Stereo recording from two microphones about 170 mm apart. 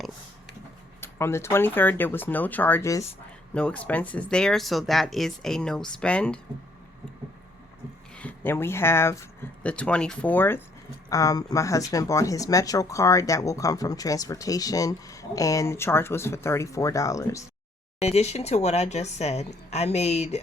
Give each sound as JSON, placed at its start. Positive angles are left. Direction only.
{"t": 1.0, "sound": "speech", "side_deg": 15}
{"t": 8.1, "sound": "speech", "side_deg": 10}
{"t": 18.0, "sound": "a woman's voice", "side_deg": 40}